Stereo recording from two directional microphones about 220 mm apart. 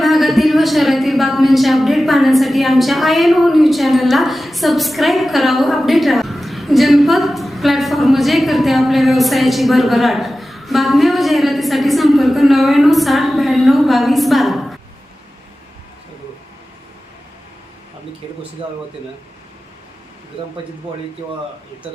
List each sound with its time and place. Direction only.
0.0 s speech: centre (ahead or behind)
18.6 s speech: 25° right (ahead or behind)